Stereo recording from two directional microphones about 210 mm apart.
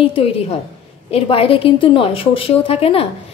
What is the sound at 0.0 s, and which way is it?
A woman's voice, 25° left (ahead or behind).